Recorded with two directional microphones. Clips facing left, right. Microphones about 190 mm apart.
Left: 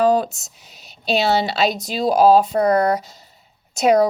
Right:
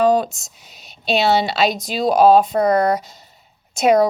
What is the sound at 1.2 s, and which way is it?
Speech, 40° left (ahead or behind).